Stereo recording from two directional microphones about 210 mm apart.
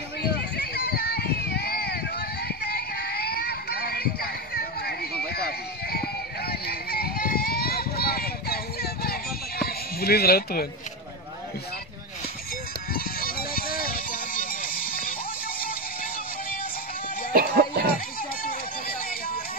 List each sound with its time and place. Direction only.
0.2 s a sound: 50° left (ahead or behind)
12.9 s music: 45° left (ahead or behind)
17.3 s music: 45° right (ahead or behind)